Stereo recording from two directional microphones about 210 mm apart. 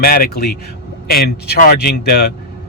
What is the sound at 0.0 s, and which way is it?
Speech, 45° left (ahead or behind).